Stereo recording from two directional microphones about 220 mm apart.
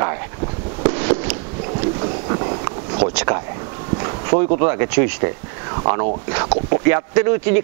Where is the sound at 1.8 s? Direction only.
25° right (ahead or behind).